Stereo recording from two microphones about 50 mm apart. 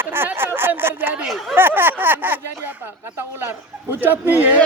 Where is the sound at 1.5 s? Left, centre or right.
Right.